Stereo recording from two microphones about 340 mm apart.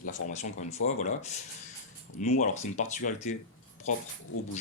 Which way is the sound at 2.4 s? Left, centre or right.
Left.